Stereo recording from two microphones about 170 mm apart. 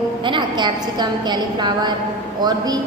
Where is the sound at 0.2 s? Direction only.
30° right (ahead or behind).